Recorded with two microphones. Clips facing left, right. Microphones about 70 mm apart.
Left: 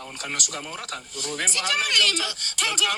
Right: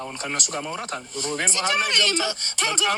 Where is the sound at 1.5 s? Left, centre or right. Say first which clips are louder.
Right 1 dB; right.